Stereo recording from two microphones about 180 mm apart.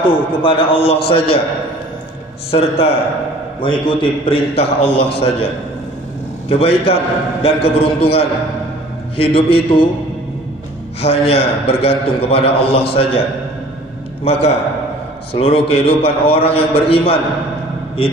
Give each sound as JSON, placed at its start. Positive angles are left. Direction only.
{"t": 0.1, "sound": "a man's voice", "side_deg": 30}
{"t": 2.5, "sound": "a man's voice", "side_deg": 35}
{"t": 6.6, "sound": "a man's voice", "side_deg": 35}
{"t": 11.0, "sound": "a man's voice", "side_deg": 35}
{"t": 14.2, "sound": "a man's voice", "side_deg": 35}